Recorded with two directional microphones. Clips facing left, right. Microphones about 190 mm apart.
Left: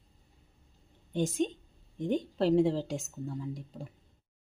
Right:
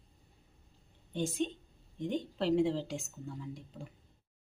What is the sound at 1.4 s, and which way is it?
A woman's voice, 45° left (ahead or behind).